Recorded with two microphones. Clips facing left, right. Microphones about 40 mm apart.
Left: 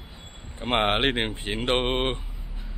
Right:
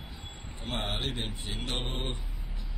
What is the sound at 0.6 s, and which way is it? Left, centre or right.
Speech, left.